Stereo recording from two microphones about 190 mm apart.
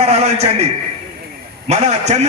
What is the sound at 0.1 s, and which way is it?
A man's voice, 35° right (ahead or behind).